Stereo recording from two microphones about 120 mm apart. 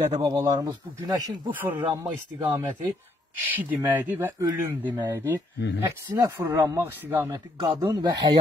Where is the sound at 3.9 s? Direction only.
15° right (ahead or behind).